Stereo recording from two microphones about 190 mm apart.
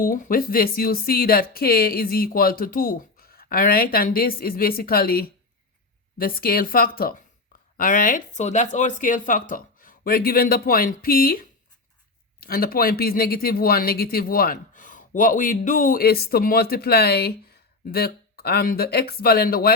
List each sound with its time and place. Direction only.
0.0 s speech: 50° left (ahead or behind)